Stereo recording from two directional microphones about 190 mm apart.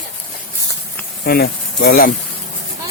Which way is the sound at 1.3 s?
55° left (ahead or behind).